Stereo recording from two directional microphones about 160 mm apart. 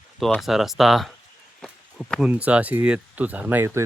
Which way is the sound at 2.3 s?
10° right (ahead or behind).